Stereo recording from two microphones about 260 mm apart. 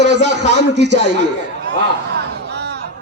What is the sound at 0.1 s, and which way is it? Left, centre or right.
A man's voice, right.